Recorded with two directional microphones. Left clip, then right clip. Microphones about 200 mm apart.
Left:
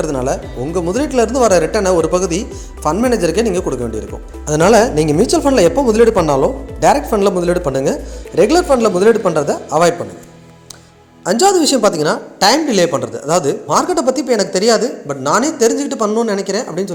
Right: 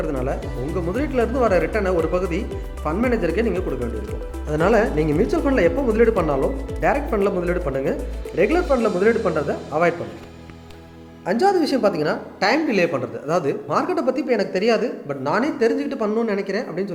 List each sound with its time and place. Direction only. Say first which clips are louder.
0.0 s speech: left 7 dB; 35° left (ahead or behind)
11.3 s a woman's voice: left 7 dB; 30° left (ahead or behind)